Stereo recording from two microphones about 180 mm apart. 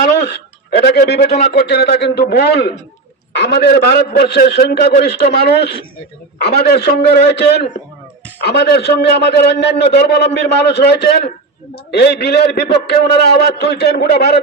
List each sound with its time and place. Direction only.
0.8 s a man's voice: 65° left (ahead or behind)